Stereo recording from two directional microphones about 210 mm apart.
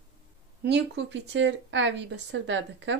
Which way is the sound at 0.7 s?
55° right (ahead or behind).